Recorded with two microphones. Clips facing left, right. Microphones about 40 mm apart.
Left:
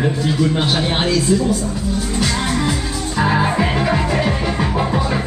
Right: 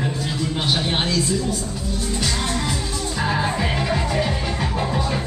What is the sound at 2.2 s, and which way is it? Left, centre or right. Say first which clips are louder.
Music: left 5 dB; centre.